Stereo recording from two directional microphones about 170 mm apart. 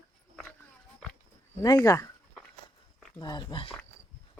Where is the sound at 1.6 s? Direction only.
20° left (ahead or behind).